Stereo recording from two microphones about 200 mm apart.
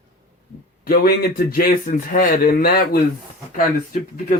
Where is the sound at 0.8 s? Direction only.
50° left (ahead or behind).